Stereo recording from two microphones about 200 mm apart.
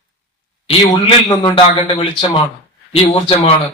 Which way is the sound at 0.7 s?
25° left (ahead or behind).